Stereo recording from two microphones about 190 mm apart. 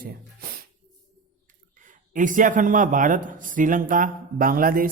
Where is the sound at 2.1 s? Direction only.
45° right (ahead or behind).